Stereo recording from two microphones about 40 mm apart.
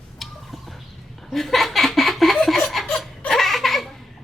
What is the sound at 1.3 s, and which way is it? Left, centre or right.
Laughter, centre.